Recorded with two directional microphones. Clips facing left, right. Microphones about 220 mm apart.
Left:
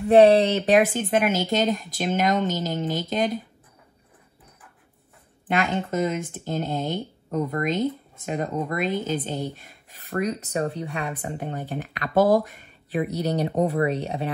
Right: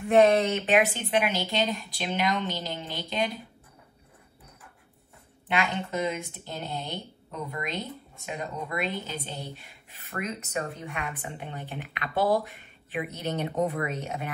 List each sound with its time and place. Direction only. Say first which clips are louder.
0.1 s speech: left 5 dB; 35° left (ahead or behind)
5.5 s speech: left 4 dB; 45° left (ahead or behind)